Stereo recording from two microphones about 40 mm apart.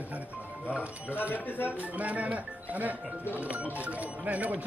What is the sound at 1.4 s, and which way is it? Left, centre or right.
Speech, left.